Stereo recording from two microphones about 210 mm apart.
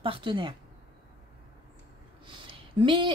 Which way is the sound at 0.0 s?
25° right (ahead or behind).